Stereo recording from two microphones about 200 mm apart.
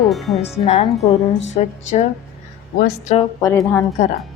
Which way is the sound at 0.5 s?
30° left (ahead or behind).